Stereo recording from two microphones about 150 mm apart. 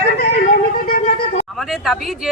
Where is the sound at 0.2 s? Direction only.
80° left.